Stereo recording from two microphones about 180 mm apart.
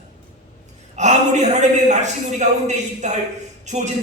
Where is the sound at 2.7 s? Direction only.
40° right (ahead or behind).